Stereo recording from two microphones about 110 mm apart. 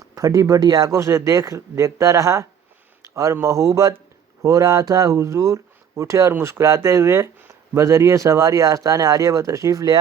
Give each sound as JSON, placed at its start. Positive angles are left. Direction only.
{"t": 0.2, "sound": "speech", "side_deg": -30}